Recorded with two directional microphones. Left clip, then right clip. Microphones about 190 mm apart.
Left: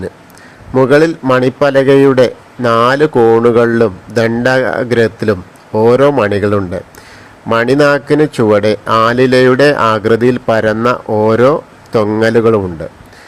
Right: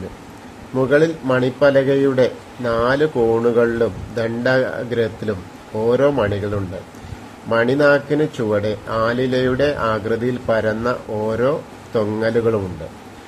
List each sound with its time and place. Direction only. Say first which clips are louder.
0.8 s a man's voice: left 7 dB; 40° left (ahead or behind)